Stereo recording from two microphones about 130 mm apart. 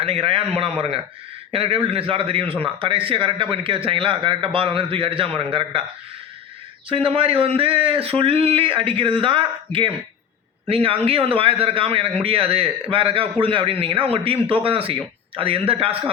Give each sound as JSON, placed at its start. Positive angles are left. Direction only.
{"t": 0.0, "sound": "a man's voice", "side_deg": -45}
{"t": 6.9, "sound": "a man's voice", "side_deg": -45}